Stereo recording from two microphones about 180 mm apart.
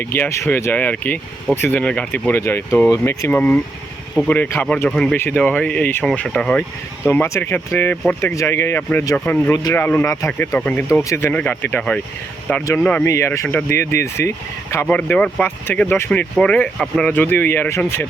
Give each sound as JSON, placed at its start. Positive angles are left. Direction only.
{"t": 0.0, "sound": "speech", "side_deg": 10}